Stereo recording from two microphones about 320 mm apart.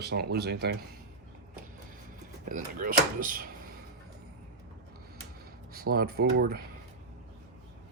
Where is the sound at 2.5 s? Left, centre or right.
Right.